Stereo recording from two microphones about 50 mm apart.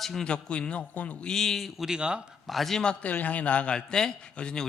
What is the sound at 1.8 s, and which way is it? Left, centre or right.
Speech, centre.